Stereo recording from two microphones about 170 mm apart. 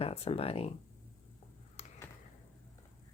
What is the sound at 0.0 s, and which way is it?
Speech, 35° left (ahead or behind).